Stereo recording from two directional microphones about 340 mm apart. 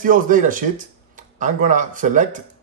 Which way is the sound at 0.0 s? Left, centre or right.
Right.